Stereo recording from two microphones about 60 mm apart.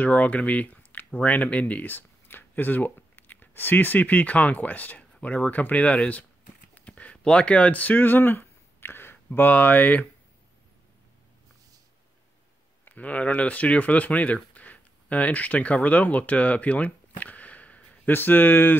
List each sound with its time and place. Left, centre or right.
0.0 s speech: left
12.8 s speech: left
18.1 s speech: left